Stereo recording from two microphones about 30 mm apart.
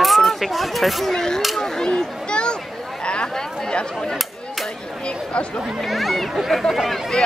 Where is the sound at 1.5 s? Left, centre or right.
Centre.